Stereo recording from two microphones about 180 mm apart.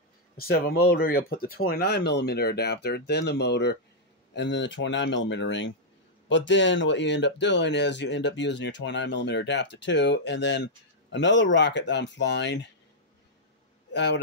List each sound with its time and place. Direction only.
0.4 s speech: 60° left (ahead or behind)
4.3 s speech: 80° left
13.9 s speech: 75° left (ahead or behind)